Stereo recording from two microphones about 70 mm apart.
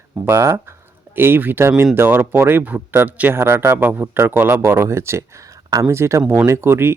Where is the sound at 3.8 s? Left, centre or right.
Right.